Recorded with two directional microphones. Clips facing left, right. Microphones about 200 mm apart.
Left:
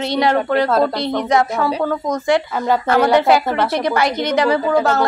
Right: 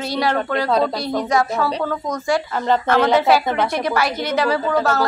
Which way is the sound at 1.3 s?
20° left (ahead or behind).